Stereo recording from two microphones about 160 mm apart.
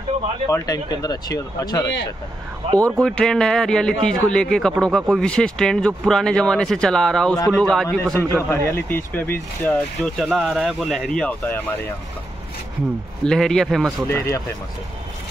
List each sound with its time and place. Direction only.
0.5 s speech: 25° left (ahead or behind)
3.0 s speech: 5° left (ahead or behind)
8.5 s speech: 15° left (ahead or behind)
13.2 s speech: 5° left (ahead or behind)
14.0 s speech: 15° left (ahead or behind)